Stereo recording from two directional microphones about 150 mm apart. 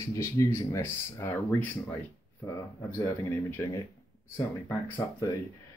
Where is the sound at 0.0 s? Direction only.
20° left (ahead or behind).